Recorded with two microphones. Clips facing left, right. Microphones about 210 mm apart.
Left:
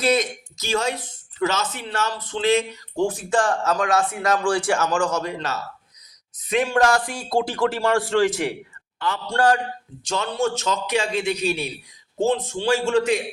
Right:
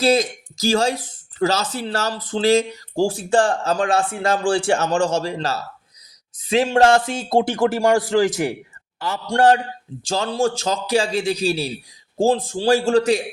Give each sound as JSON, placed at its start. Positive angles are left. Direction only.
{"t": 0.0, "sound": "speech", "side_deg": -30}
{"t": 10.0, "sound": "speech", "side_deg": -30}